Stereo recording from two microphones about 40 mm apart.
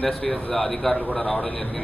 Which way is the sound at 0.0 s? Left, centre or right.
Centre.